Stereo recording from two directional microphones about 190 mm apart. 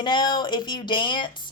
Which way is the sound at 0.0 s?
25° left (ahead or behind).